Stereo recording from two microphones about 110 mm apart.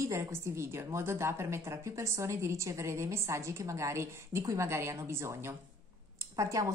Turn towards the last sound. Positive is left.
turn(degrees=-30)  # may be behind; listen again after turning